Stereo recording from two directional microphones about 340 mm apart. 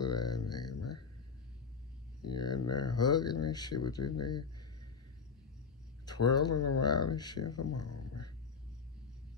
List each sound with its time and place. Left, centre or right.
0.0 s music: left
2.2 s speech: left
6.1 s speech: left